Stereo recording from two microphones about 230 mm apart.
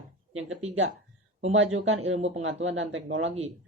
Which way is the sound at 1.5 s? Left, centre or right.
Right.